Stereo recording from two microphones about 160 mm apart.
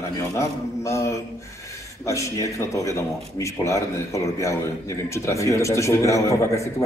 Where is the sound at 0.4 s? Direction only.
20° left (ahead or behind).